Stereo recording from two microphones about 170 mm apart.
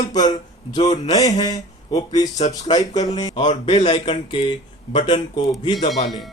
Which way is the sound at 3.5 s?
40° left (ahead or behind).